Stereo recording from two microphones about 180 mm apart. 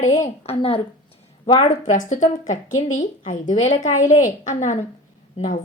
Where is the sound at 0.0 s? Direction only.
40° left (ahead or behind).